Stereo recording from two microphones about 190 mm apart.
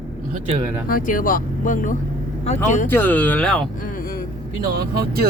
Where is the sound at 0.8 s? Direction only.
45° left (ahead or behind).